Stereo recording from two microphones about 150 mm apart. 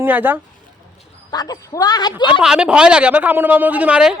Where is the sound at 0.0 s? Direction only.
10° right (ahead or behind).